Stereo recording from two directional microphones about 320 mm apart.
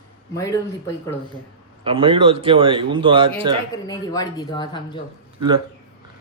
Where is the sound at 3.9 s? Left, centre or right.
Centre.